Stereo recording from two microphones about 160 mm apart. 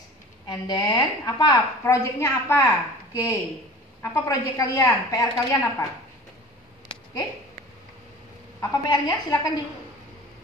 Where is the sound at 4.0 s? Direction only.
20° left (ahead or behind).